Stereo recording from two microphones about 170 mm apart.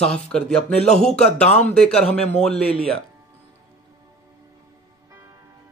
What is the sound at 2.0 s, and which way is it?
Speech, 40° left (ahead or behind).